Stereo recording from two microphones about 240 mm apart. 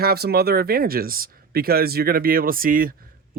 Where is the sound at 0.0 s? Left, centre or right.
Right.